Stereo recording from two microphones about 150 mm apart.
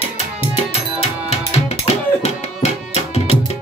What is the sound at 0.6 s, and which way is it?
Music, 45° left (ahead or behind).